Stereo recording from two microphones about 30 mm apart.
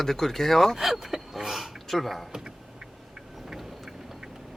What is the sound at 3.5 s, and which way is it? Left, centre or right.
Vehicle, centre.